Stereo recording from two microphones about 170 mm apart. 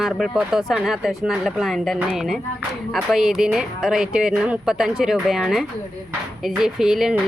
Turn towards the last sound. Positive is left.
turn(degrees=-5)  # may be behind; listen again after turning